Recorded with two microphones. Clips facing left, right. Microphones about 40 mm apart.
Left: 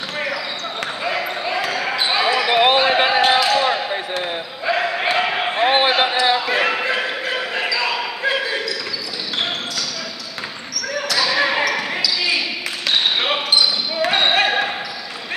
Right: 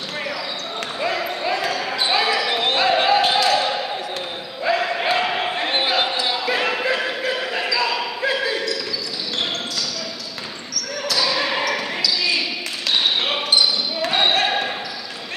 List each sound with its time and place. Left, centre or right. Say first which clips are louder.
1.0 s basketball bounce: right 1 dB; centre
4.6 s basketball bounce: even; centre
11.0 s basketball bounce: left 3 dB; centre